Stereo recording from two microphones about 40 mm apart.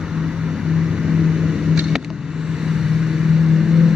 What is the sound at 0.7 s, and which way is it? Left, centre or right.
Vehicle, centre.